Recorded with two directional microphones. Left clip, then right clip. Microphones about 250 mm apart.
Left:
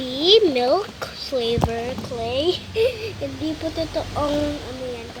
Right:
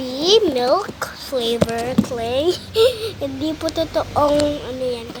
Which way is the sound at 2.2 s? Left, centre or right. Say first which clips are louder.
Right 1 dB; centre.